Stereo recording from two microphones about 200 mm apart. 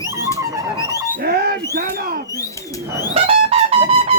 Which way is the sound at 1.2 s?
50° right (ahead or behind).